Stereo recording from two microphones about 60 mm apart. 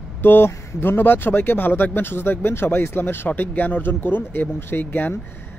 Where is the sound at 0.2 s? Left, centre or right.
Left.